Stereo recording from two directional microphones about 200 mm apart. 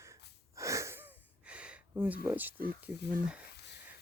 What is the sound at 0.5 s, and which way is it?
Sniff, 15° right (ahead or behind).